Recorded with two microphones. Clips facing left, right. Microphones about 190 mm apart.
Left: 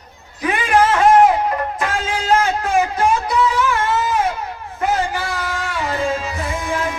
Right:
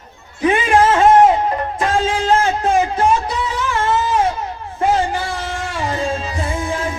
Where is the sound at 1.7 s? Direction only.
30° right (ahead or behind).